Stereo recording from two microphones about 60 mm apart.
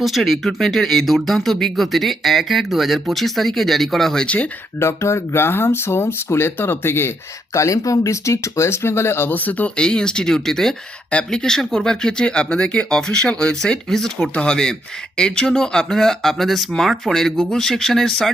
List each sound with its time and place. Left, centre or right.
0.0 s speech: centre
4.8 s speech: left
7.5 s speech: left; by 18.3 s centre